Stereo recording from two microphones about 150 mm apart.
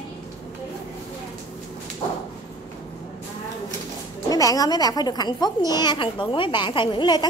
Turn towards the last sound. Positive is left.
turn(degrees=30)  # may be behind; listen again after turning